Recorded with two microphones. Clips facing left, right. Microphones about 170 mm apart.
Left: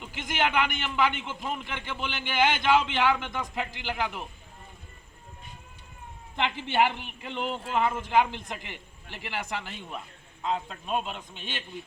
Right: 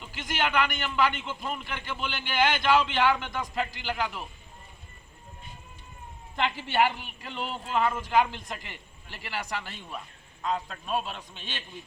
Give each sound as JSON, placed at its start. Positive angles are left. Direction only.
{"t": 0.0, "sound": "a man's voice", "side_deg": 20}
{"t": 6.3, "sound": "a man's voice", "side_deg": 20}